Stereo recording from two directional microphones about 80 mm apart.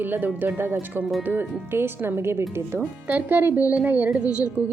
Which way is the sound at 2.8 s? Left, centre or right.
Right.